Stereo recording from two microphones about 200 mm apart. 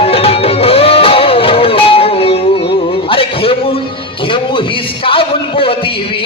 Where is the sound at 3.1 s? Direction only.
25° left (ahead or behind).